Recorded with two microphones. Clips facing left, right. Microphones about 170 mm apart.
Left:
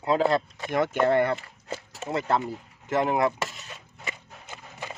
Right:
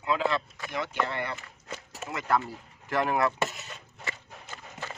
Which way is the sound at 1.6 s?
30° left (ahead or behind).